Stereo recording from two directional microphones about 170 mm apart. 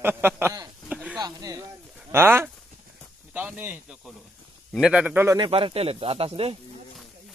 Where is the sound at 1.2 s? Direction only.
25° right (ahead or behind).